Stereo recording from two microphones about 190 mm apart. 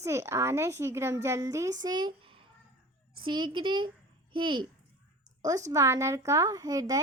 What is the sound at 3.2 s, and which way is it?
Child singing, 25° right (ahead or behind).